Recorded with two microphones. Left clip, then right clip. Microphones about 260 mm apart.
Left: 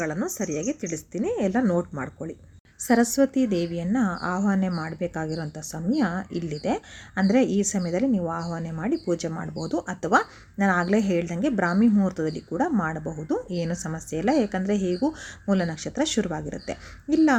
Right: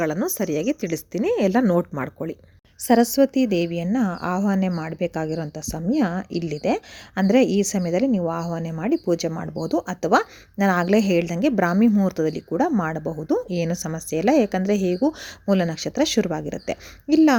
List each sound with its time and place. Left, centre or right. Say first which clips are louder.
0.0 s a woman's voice: right 5 dB; right